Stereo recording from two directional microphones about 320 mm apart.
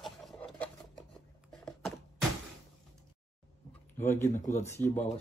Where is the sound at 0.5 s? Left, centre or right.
Centre.